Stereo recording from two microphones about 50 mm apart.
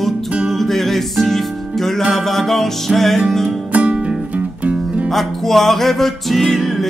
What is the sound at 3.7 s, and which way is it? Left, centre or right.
Music, right.